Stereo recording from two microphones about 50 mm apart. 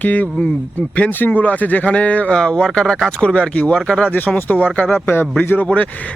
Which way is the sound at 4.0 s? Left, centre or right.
Left.